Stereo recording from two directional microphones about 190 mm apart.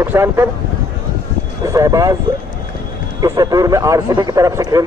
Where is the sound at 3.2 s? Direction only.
20° right (ahead or behind).